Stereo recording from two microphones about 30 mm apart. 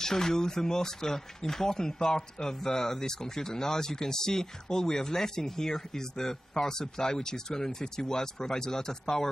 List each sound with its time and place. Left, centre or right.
0.0 s speech: centre